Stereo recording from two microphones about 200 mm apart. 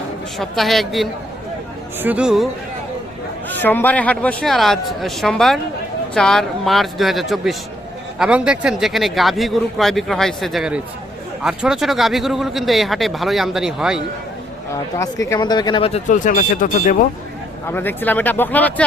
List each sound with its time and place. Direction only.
0.3 s speech: centre (ahead or behind)
3.5 s speech: 10° left (ahead or behind)
14.9 s speech: 15° left (ahead or behind); by 17.1 s 40° left (ahead or behind)
17.7 s speech: 10° left (ahead or behind)